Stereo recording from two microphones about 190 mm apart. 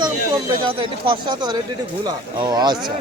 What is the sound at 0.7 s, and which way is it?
Speech, 25° right (ahead or behind).